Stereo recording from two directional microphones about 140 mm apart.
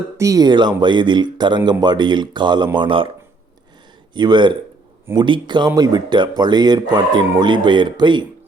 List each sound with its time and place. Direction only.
0.2 s speech: 25° right (ahead or behind)
4.1 s speech: 30° right (ahead or behind)